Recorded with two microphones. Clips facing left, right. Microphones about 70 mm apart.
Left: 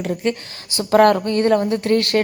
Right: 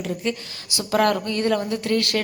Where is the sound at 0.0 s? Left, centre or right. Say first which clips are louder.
Left 5 dB; left.